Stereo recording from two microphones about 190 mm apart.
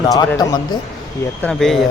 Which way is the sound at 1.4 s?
Centre (ahead or behind).